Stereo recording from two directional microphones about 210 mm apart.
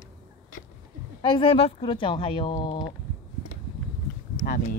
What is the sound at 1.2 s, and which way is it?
Speech, 25° left (ahead or behind).